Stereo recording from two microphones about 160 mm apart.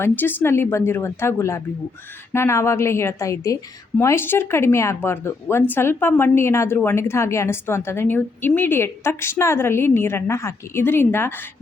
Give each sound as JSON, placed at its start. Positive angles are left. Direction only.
{"t": 0.0, "sound": "a woman's voice", "side_deg": 10}